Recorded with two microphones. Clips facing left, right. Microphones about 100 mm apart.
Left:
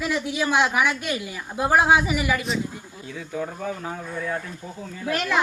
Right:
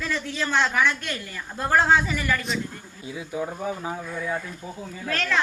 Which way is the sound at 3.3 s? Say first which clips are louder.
Even; 10° right (ahead or behind).